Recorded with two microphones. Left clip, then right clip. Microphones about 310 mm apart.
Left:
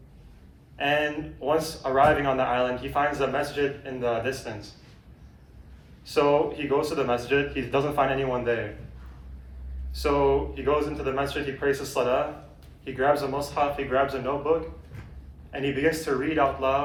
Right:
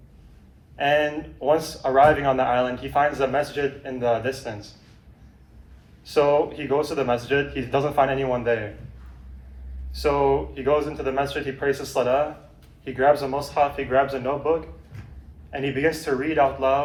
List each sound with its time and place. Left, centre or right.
0.8 s a man's voice: centre
6.1 s a man's voice: centre
9.9 s a man's voice: centre